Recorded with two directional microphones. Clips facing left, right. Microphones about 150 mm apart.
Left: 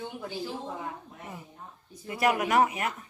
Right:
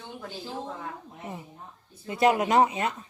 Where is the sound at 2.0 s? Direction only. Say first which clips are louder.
Right 4 dB; 25° right (ahead or behind).